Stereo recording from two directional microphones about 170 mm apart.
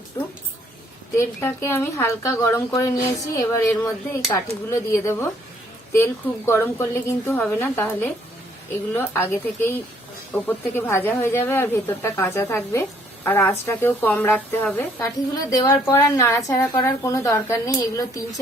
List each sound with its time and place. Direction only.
1.1 s a woman's voice: 15° left (ahead or behind)